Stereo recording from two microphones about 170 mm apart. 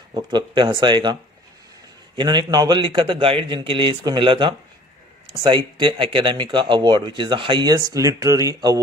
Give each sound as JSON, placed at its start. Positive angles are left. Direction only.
{"t": 0.1, "sound": "speech", "side_deg": -25}
{"t": 2.1, "sound": "speech", "side_deg": -25}